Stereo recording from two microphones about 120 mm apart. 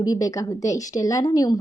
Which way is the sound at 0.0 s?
30° left (ahead or behind).